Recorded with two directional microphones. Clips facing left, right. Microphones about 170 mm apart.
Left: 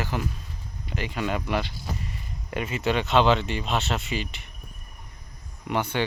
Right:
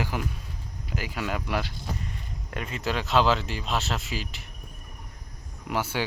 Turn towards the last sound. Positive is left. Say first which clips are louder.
# left 2 dB
turn(degrees=-5)  # may be behind; listen again after turning